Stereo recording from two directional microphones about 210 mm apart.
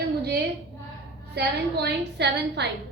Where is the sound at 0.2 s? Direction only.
50° right (ahead or behind).